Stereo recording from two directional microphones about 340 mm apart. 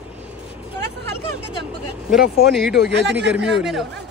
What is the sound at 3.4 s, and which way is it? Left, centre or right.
Speech, centre.